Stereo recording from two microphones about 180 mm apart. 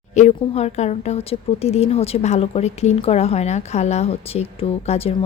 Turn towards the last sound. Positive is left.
turn(degrees=35)  # may be behind; listen again after turning